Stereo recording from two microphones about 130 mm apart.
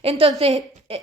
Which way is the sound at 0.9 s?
50° right (ahead or behind).